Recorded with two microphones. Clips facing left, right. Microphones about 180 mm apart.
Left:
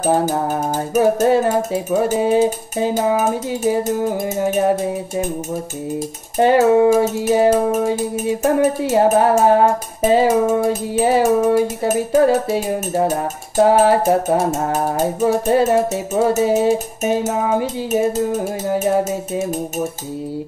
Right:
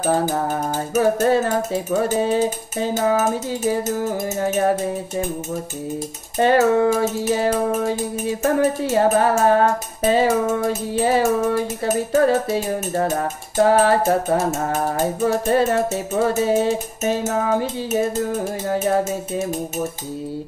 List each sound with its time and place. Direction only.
0.9 s music: 20° left (ahead or behind)
4.4 s music: 15° left (ahead or behind)
6.3 s music: 20° left (ahead or behind)
15.7 s music: 15° left (ahead or behind)